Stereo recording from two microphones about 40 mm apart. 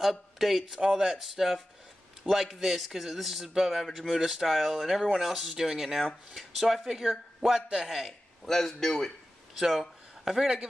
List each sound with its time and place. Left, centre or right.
0.0 s speech: centre
8.0 s a man's voice: centre
9.6 s speech: centre